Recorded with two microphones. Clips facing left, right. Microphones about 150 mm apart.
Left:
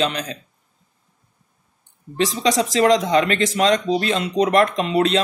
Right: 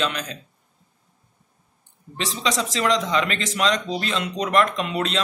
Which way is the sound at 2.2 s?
35° left (ahead or behind).